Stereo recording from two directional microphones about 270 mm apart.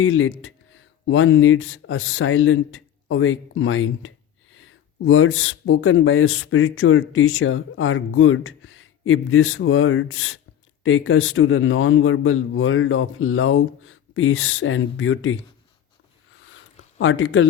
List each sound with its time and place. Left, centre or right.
0.0 s speech: left
17.0 s speech: left